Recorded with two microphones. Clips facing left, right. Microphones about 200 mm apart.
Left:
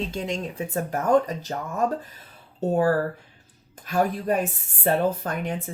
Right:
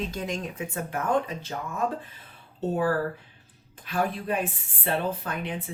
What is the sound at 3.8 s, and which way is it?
Speech, 45° left (ahead or behind).